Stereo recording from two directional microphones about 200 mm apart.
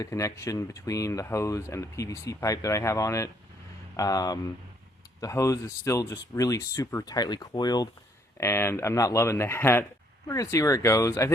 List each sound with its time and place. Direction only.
0.0 s speech: 15° left (ahead or behind)